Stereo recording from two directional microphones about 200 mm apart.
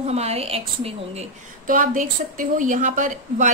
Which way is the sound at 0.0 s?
30° right (ahead or behind).